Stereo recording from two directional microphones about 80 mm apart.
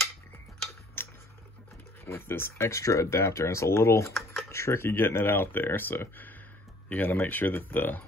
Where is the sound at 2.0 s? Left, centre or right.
Left.